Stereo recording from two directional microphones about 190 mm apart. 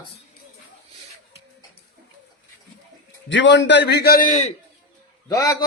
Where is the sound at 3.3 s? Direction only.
75° left (ahead or behind); by 4.5 s 40° left (ahead or behind).